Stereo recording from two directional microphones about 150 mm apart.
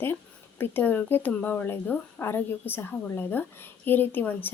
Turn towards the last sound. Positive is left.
turn(degrees=15)  # may be behind; listen again after turning